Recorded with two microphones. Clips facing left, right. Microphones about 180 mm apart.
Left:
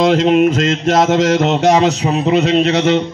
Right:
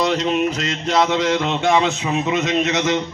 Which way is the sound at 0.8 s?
45° left (ahead or behind).